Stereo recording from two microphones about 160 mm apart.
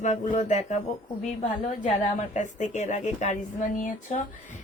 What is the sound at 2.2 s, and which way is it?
A woman's voice, 50° left (ahead or behind).